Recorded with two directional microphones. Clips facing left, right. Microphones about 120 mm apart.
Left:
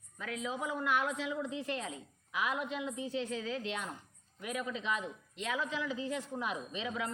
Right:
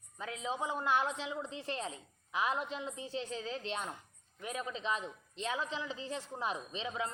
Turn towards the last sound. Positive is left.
turn(degrees=-30)  # may be behind; listen again after turning